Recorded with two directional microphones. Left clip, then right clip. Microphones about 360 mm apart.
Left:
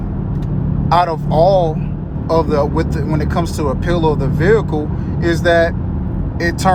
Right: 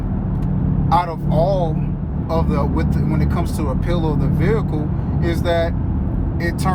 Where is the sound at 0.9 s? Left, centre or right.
Left.